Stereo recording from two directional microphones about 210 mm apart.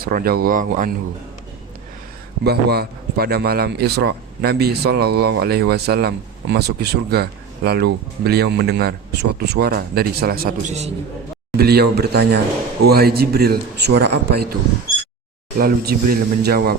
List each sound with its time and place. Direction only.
0.0 s a man's voice: 45° right (ahead or behind)
2.4 s a man's voice: 50° right (ahead or behind)
15.5 s a man's voice: 45° right (ahead or behind)